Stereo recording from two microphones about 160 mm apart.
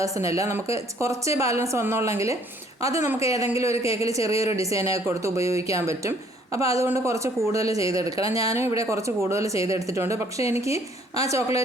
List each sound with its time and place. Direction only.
0.0 s speech: 20° right (ahead or behind)